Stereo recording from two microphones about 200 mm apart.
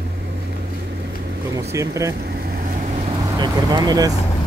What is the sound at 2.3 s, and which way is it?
Vehicle, 50° right (ahead or behind).